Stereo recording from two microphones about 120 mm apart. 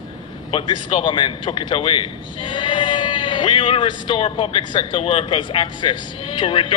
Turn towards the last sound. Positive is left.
turn(degrees=45)  # may be behind; listen again after turning